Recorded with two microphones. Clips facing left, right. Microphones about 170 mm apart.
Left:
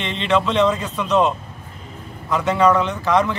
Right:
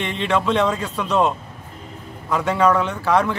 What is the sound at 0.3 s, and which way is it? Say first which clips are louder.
Speech: left 2 dB; 10° right (ahead or behind).